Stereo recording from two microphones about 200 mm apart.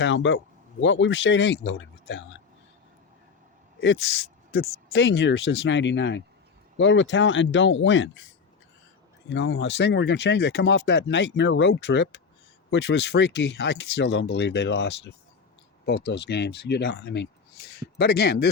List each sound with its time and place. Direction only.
0.0 s speech: 65° left (ahead or behind)
4.9 s speech: 60° left (ahead or behind)
9.3 s speech: 70° left (ahead or behind); by 18.4 s 50° left (ahead or behind)